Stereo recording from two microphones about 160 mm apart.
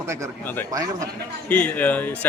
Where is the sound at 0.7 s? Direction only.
20° right (ahead or behind).